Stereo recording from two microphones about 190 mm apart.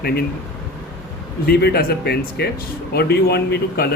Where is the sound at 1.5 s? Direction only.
55° left (ahead or behind).